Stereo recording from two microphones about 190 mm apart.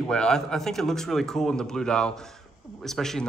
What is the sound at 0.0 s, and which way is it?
Speech, 5° left (ahead or behind).